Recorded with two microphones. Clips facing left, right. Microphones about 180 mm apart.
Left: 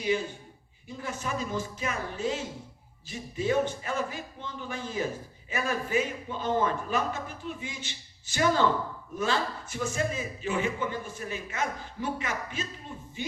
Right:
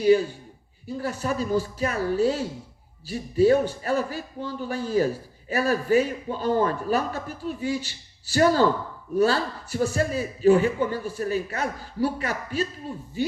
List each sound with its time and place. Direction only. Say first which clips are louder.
0.9 s speech: right 7 dB; 35° right (ahead or behind)